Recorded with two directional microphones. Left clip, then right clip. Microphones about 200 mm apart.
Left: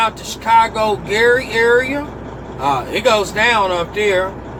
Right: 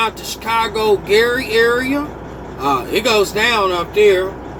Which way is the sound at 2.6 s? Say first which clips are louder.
Left 1 dB; 5° left (ahead or behind).